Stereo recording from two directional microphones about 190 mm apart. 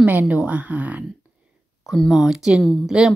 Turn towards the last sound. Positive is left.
turn(degrees=0)  # may be behind; listen again after turning